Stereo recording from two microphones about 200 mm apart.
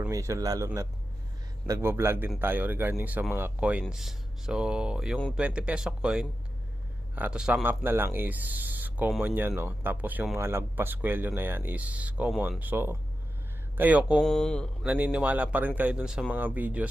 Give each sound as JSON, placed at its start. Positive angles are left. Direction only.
{"t": 0.1, "sound": "speech", "side_deg": -15}
{"t": 14.2, "sound": "speech", "side_deg": 5}
{"t": 14.8, "sound": "speech", "side_deg": -5}